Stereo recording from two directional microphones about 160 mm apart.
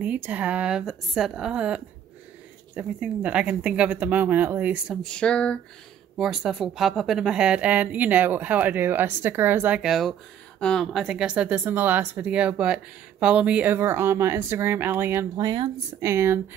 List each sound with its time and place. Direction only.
0.0 s speech: 10° right (ahead or behind)
5.0 s a sound: 5° left (ahead or behind)
6.1 s speech: 5° right (ahead or behind)
15.3 s speech: 25° right (ahead or behind)
16.0 s speech: 15° right (ahead or behind)